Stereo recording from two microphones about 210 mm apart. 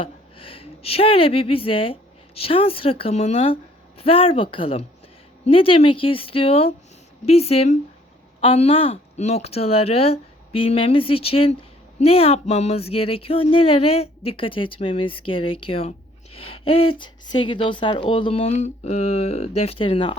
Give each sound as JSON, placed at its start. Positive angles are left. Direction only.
{"t": 0.0, "sound": "speech", "side_deg": 25}